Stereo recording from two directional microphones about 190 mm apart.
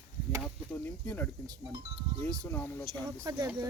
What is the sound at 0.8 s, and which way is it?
Speech, 10° left (ahead or behind).